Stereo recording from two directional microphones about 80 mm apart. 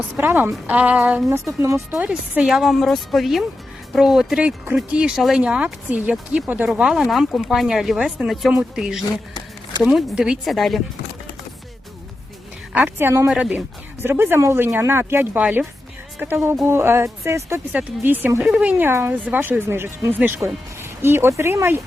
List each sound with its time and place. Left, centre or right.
0.2 s speech: right
1.3 s speech: right
2.0 s speech: centre
10.4 s speech: centre
12.7 s speech: right
13.2 s speech: centre
14.0 s speech: right
17.7 s speech: right
18.5 s speech: centre
18.8 s speech: right